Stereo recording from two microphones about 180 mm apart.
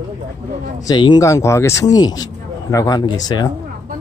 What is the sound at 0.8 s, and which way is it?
Speech, 25° left (ahead or behind).